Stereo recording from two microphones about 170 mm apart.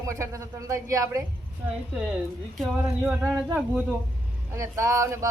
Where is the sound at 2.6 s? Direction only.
5° right (ahead or behind).